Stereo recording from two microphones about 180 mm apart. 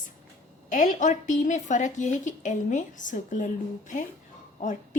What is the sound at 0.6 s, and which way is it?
A woman's voice, 45° left (ahead or behind).